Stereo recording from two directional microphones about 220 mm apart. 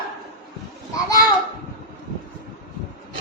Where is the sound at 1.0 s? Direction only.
15° left (ahead or behind).